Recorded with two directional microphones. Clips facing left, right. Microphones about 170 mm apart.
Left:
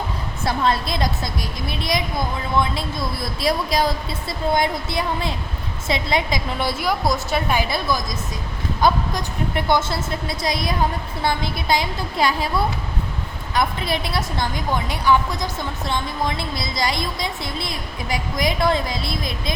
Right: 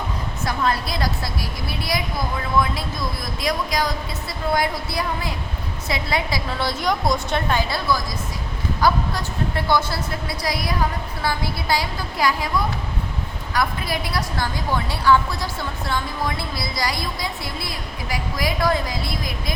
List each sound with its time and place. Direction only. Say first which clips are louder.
0.4 s a woman's voice: left 2 dB; 25° left (ahead or behind)